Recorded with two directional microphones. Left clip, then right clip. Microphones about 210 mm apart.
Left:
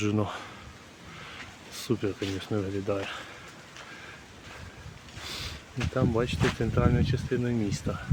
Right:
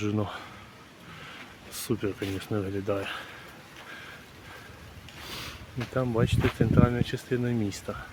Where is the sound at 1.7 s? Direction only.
Centre (ahead or behind).